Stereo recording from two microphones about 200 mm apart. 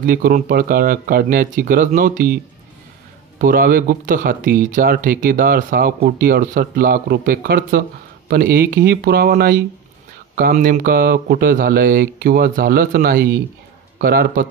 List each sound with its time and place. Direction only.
0.0 s speech: 45° right (ahead or behind)
3.3 s speech: 45° right (ahead or behind)